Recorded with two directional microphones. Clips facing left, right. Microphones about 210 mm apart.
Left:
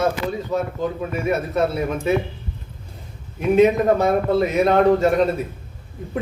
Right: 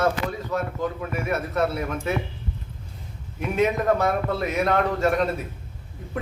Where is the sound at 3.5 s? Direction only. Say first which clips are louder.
Left 6 dB; 25° left (ahead or behind).